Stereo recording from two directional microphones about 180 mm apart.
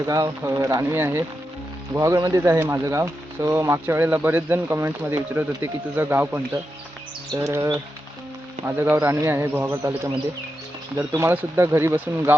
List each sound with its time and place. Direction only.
0.0 s speech: 20° right (ahead or behind)
11.1 s speech: 15° right (ahead or behind)